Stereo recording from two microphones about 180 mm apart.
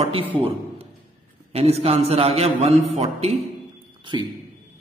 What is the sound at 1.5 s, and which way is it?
A man's voice, 35° right (ahead or behind).